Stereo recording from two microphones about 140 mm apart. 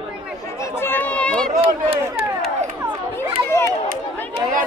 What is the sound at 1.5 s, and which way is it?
Speech, 45° right (ahead or behind).